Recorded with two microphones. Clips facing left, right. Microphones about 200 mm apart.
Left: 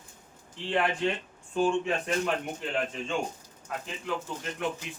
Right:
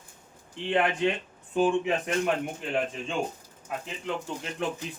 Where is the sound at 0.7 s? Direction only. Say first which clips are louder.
Right 2 dB; 20° right (ahead or behind).